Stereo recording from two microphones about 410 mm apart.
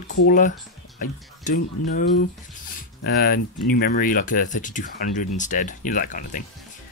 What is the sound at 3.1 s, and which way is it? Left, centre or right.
Speech, left.